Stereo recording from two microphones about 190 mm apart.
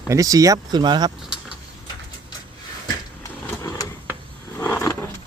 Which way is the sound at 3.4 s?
15° left (ahead or behind).